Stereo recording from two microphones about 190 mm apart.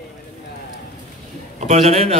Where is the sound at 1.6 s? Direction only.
30° right (ahead or behind).